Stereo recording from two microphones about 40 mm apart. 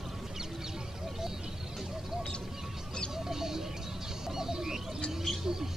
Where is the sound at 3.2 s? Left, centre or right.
Centre.